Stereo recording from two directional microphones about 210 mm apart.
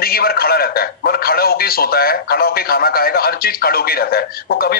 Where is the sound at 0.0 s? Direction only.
45° left (ahead or behind).